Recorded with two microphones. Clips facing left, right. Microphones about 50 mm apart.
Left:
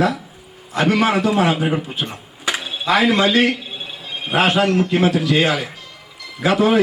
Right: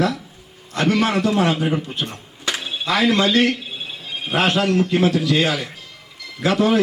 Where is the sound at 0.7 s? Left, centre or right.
Centre.